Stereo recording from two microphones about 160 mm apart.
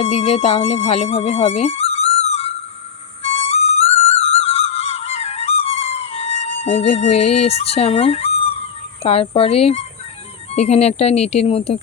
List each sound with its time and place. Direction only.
0.0 s speech: 40° left (ahead or behind)
3.2 s music: 40° left (ahead or behind)
9.0 s speech: 35° left (ahead or behind)